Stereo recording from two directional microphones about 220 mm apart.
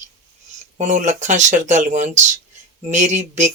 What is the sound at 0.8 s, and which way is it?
Speech, 35° right (ahead or behind).